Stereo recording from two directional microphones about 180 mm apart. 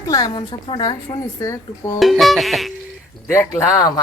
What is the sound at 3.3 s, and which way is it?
Speech, 15° left (ahead or behind).